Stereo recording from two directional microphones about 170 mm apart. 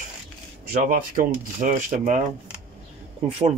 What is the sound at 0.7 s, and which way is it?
Speech, 55° right (ahead or behind).